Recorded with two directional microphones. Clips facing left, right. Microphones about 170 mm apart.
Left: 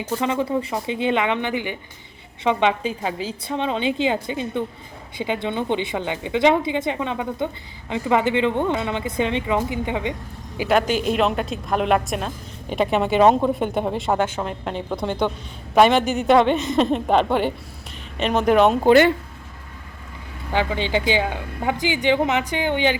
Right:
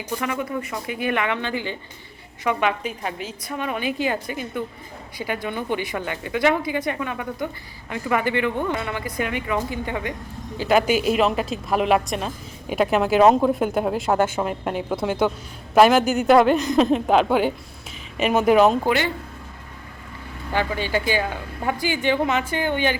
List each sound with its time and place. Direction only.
0.2 s speech: 25° left (ahead or behind)
10.7 s a woman's voice: 5° right (ahead or behind)
20.5 s a woman's voice: 15° left (ahead or behind)